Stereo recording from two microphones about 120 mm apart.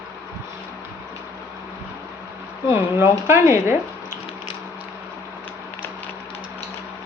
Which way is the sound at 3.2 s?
20° right (ahead or behind).